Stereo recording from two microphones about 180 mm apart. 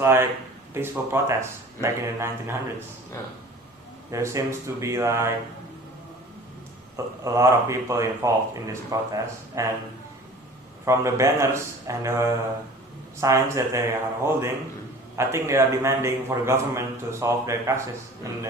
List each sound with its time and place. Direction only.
0.0 s a man's voice: 15° right (ahead or behind)
4.1 s a man's voice: 15° right (ahead or behind)
6.9 s a man's voice: 15° right (ahead or behind)
10.8 s a man's voice: 15° right (ahead or behind)